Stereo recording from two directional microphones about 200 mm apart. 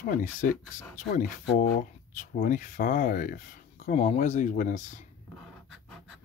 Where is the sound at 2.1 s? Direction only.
40° left (ahead or behind).